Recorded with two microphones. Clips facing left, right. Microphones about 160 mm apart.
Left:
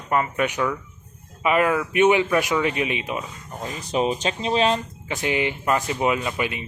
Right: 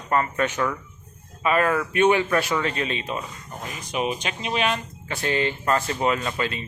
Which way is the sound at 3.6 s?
30° left (ahead or behind).